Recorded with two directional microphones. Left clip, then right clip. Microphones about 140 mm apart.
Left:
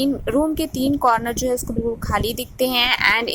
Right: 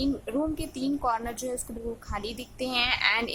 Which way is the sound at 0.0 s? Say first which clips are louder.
Left 9 dB; 40° left (ahead or behind).